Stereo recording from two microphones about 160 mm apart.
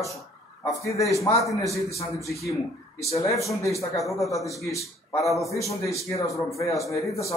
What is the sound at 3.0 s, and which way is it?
Speech, 40° left (ahead or behind).